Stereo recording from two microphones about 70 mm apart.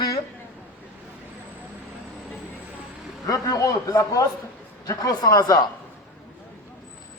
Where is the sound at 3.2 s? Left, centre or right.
Left.